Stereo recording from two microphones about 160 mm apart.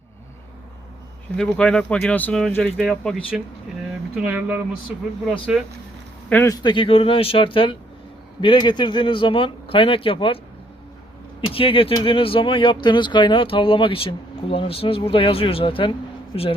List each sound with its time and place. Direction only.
1.4 s speech: 5° left (ahead or behind)
4.1 s speech: 10° right (ahead or behind)
6.2 s speech: 10° left (ahead or behind)
6.5 s speech: 25° left (ahead or behind)